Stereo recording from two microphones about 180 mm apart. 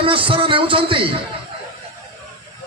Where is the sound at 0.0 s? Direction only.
30° right (ahead or behind).